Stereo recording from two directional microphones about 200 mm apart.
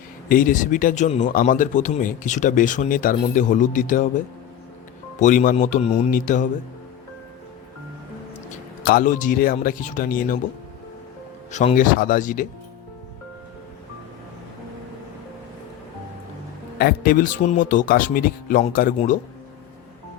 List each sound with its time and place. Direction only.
0.3 s a man's voice: 45° left (ahead or behind)
5.2 s a man's voice: 40° left (ahead or behind)
8.4 s speech: 45° left (ahead or behind)
11.5 s a man's voice: 40° left (ahead or behind)
16.7 s speech: 50° left (ahead or behind)